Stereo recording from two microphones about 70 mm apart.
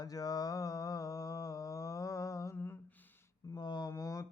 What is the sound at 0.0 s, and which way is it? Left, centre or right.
Mantra, left.